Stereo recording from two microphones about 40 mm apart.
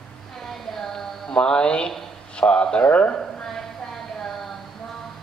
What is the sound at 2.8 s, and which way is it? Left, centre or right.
Speech, left.